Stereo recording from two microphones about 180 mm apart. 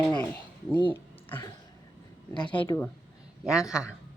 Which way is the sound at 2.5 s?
25° left (ahead or behind).